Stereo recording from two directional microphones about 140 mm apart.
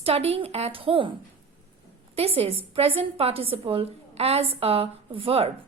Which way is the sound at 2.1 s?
45° right (ahead or behind).